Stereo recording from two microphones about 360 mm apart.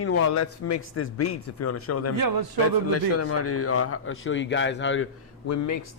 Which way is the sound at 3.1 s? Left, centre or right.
Left.